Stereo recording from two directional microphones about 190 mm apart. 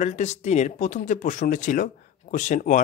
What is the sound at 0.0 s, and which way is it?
Speech, 35° left (ahead or behind).